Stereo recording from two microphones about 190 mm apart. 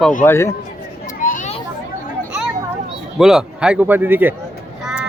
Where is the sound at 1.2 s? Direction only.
45° left (ahead or behind).